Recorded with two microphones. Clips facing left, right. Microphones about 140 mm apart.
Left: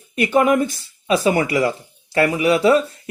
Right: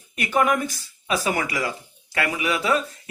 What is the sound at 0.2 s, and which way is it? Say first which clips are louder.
Speech: left 6 dB; 30° left (ahead or behind).